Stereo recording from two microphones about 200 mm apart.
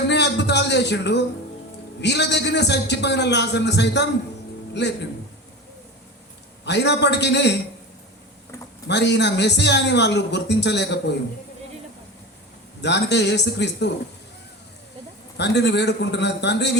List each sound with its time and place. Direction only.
0.1 s a man's voice: 60° left (ahead or behind)
6.7 s a man's voice: 60° left (ahead or behind)
8.9 s a man's voice: 60° left (ahead or behind)
12.8 s a man's voice: 60° left (ahead or behind)
15.4 s a man's voice: 60° left (ahead or behind)